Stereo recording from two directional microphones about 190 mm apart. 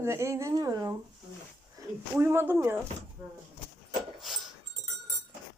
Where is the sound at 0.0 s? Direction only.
15° right (ahead or behind).